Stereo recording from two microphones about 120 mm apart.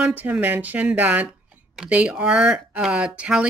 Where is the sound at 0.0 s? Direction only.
15° right (ahead or behind).